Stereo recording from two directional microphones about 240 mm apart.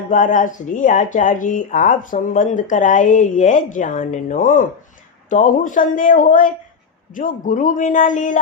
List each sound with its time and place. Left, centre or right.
0.1 s speech: left